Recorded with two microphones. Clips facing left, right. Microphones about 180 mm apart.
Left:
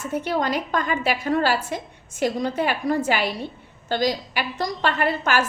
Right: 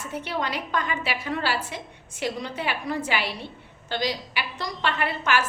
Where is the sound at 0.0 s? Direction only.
45° left (ahead or behind).